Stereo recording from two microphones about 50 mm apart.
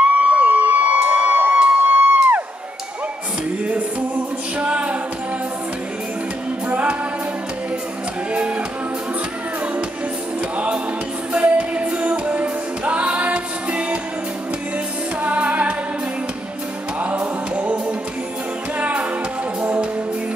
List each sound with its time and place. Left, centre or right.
0.0 s a sound: right
4.6 s a capella: right
6.7 s music: right
11.3 s music: right
15.2 s music: right
17.6 s music: right